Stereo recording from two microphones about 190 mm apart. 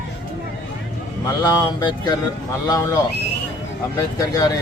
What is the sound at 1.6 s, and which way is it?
Speech, 20° left (ahead or behind).